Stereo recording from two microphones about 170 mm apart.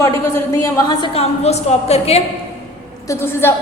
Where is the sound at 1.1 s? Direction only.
40° left (ahead or behind).